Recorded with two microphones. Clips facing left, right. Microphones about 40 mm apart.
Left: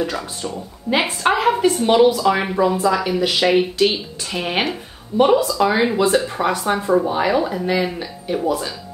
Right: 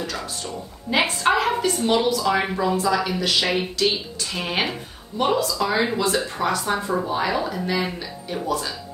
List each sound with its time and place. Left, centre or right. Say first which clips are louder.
0.0 s speech: left 6 dB; left
0.9 s speech: left 2 dB; centre
2.3 s speech: left 3 dB; centre